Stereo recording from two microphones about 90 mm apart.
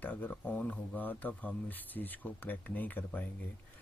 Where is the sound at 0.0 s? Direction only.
20° left (ahead or behind).